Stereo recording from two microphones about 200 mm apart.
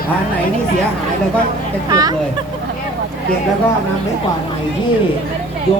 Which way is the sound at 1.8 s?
20° right (ahead or behind).